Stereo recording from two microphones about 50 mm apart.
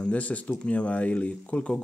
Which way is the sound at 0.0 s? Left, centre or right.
Left.